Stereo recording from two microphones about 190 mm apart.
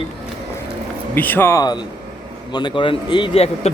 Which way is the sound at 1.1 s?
10° left (ahead or behind).